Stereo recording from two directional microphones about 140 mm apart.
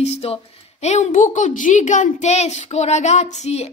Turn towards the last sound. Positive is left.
turn(degrees=50)  # may be behind; listen again after turning